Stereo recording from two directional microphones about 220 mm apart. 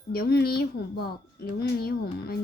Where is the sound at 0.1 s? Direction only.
45° left (ahead or behind).